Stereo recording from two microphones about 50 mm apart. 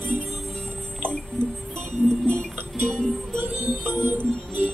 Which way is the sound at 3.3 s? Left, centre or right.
Right.